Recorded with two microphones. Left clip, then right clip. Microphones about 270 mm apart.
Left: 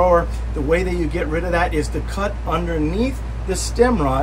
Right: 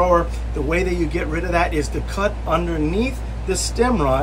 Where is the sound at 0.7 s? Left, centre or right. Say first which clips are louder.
Left 2 dB; centre.